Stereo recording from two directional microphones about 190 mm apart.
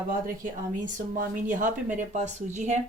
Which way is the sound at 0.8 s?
45° right (ahead or behind).